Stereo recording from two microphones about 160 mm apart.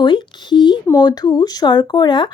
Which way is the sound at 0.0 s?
30° left (ahead or behind).